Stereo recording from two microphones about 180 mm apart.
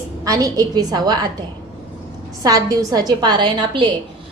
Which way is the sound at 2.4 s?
20° right (ahead or behind).